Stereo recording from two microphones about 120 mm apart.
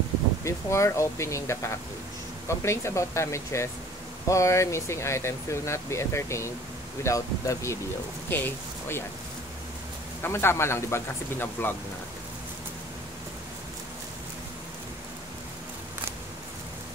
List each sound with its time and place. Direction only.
0.4 s speech: 25° left (ahead or behind)
10.2 s speech: 20° left (ahead or behind)